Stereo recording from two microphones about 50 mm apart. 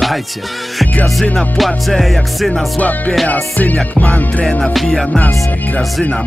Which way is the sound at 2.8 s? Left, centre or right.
Left.